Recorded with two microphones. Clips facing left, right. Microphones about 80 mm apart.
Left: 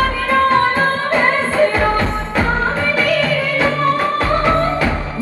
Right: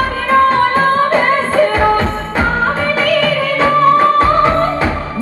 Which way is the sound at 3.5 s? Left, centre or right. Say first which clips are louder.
Right 8 dB; right.